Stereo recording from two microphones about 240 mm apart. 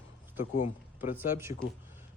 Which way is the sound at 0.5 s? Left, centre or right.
Left.